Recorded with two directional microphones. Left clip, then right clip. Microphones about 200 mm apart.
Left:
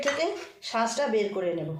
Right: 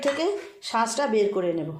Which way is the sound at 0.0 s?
40° right (ahead or behind).